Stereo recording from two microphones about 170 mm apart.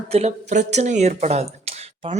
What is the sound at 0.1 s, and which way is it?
Speech, 40° right (ahead or behind).